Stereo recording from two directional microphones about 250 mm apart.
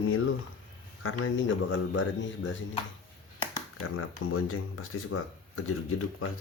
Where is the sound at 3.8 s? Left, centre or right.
Left.